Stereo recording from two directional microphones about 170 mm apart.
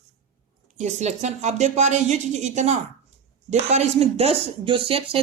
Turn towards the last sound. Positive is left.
turn(degrees=-35)  # may be behind; listen again after turning